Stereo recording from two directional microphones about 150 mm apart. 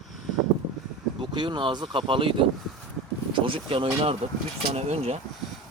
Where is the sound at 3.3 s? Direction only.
35° right (ahead or behind).